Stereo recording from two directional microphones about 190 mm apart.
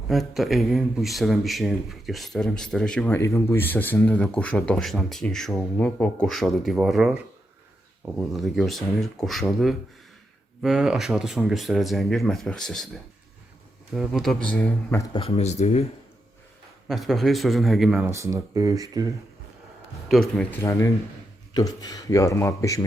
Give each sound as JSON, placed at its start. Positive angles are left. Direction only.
{"t": 0.1, "sound": "speech", "side_deg": 0}
{"t": 8.2, "sound": "speech", "side_deg": 0}
{"t": 13.9, "sound": "speech", "side_deg": 0}
{"t": 15.1, "sound": "speech", "side_deg": 30}
{"t": 16.9, "sound": "speech", "side_deg": 0}
{"t": 18.0, "sound": "speech", "side_deg": -15}
{"t": 20.1, "sound": "a man's voice", "side_deg": 5}